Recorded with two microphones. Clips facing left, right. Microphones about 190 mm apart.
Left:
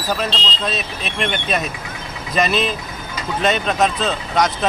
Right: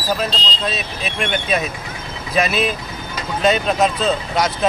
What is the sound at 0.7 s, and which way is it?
Speech, 5° right (ahead or behind).